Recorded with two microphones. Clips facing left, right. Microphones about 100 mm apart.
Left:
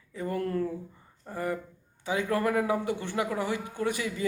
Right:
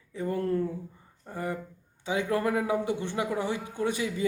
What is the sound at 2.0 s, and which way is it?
A man's voice, 20° right (ahead or behind).